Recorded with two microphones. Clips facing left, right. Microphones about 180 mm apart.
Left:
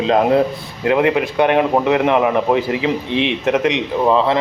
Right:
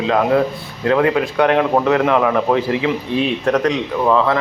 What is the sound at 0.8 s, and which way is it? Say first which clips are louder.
A man's voice: even; 20° left (ahead or behind).